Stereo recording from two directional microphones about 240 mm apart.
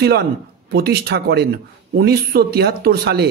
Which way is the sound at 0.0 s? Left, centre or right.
Right.